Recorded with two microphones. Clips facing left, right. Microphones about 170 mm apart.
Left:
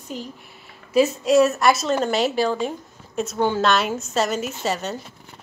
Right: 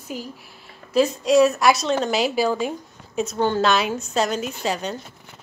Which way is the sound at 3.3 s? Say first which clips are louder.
Even; 10° left (ahead or behind).